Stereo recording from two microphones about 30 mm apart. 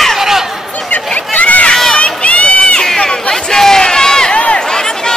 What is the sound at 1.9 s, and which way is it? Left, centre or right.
Run, left.